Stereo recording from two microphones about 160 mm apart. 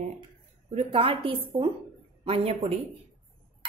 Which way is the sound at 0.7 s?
40° right (ahead or behind).